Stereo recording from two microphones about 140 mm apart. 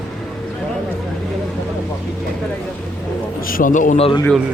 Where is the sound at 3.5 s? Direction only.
70° left (ahead or behind).